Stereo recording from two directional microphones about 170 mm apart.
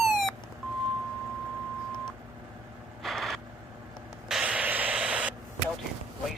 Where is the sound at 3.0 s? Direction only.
Centre (ahead or behind).